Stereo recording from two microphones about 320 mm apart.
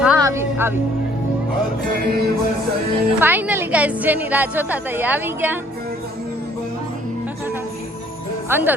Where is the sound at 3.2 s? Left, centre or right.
Centre.